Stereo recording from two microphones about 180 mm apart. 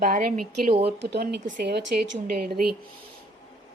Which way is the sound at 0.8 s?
65° right (ahead or behind).